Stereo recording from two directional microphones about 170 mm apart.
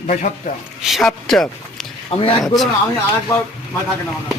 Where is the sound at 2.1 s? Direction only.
35° left (ahead or behind).